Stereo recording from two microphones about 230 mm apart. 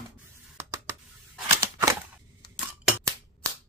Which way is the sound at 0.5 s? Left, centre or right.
Centre.